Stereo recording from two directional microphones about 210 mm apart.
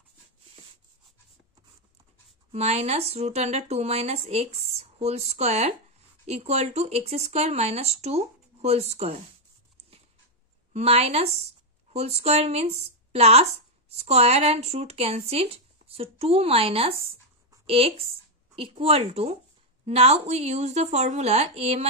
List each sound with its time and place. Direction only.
2.5 s speech: 30° right (ahead or behind)
10.7 s speech: 30° right (ahead or behind)